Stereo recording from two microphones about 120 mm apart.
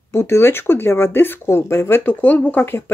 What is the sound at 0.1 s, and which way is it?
Speech, 20° left (ahead or behind).